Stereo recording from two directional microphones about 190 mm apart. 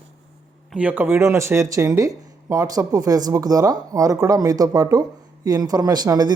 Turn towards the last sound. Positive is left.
turn(degrees=-20)  # may be behind; listen again after turning